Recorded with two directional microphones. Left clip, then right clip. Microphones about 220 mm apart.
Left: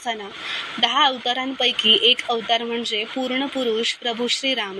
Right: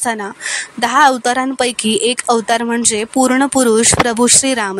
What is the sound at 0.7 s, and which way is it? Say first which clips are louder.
Speech: right 7 dB; 50° right (ahead or behind).